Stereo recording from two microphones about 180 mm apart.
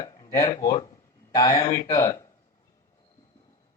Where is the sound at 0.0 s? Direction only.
20° left (ahead or behind).